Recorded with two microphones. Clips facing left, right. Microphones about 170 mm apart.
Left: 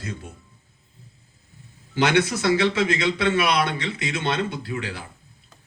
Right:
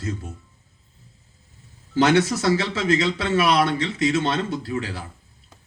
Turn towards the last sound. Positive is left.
turn(degrees=-35)  # may be behind; listen again after turning